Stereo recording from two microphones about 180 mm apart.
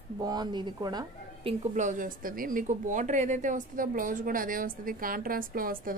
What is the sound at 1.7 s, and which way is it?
Speech, 45° right (ahead or behind).